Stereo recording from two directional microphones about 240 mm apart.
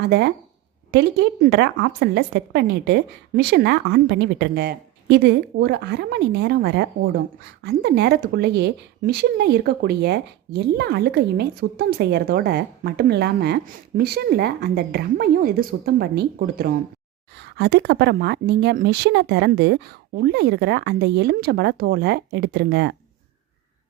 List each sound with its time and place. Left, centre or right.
0.0 s a woman's voice: right